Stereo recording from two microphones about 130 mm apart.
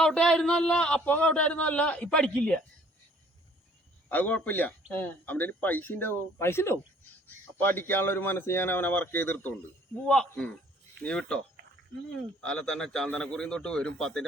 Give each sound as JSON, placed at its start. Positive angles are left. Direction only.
{"t": 0.0, "sound": "speech", "side_deg": 5}
{"t": 4.1, "sound": "a man's voice", "side_deg": 15}